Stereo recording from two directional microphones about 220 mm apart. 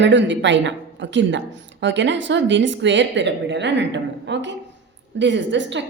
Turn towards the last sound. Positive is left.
turn(degrees=-55)  # may be behind; listen again after turning